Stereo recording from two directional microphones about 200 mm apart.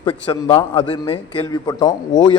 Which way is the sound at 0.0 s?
25° left (ahead or behind).